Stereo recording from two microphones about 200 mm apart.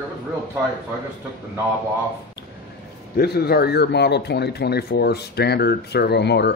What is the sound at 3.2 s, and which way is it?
Speech, 50° left (ahead or behind).